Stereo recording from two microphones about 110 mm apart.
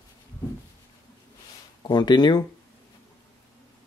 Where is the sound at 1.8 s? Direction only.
40° left (ahead or behind).